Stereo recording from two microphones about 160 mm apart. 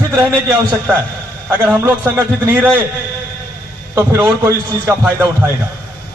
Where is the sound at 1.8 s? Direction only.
20° right (ahead or behind).